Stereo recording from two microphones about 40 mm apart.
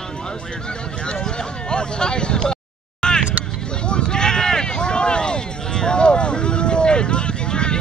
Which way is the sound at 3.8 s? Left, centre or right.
Left.